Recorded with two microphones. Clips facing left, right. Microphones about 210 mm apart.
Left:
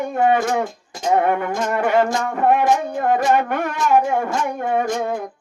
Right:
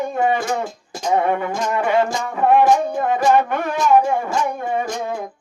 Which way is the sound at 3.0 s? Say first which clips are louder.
Right 1 dB; 55° left (ahead or behind).